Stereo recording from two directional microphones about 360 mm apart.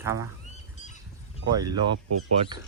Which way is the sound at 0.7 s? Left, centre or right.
Centre.